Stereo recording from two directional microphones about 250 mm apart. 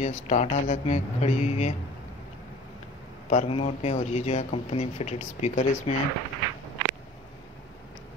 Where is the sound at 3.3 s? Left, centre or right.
Left.